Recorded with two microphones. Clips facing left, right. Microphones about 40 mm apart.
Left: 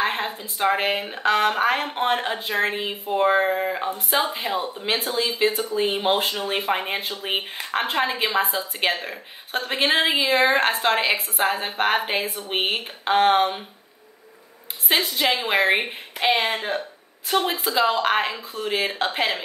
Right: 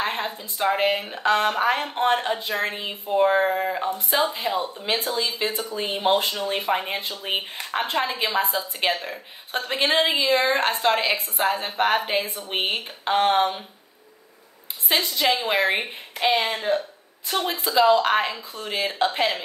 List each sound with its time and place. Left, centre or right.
0.0 s speech: centre
8.4 s a woman's voice: left
8.7 s speech: centre
15.1 s a woman's voice: centre